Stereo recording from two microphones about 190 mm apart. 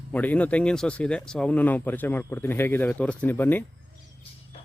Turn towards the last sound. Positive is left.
turn(degrees=10)  # may be behind; listen again after turning